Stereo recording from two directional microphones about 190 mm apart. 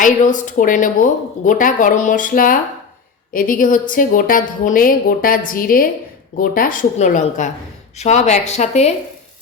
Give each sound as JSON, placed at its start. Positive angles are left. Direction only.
{"t": 0.0, "sound": "a woman's voice", "side_deg": 40}